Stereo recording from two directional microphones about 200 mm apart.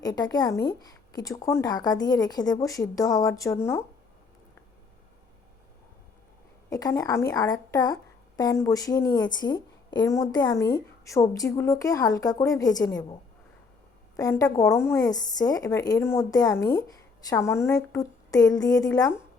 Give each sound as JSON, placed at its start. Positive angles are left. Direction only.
{"t": 0.0, "sound": "a woman's voice", "side_deg": 20}
{"t": 6.7, "sound": "a woman's voice", "side_deg": 15}
{"t": 14.2, "sound": "a woman's voice", "side_deg": 15}